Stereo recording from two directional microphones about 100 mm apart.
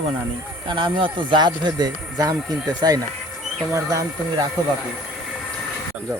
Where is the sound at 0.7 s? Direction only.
55° right (ahead or behind); by 4.4 s 30° right (ahead or behind).